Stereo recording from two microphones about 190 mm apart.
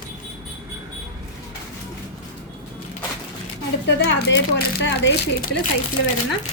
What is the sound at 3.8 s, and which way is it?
Speech, 65° left (ahead or behind).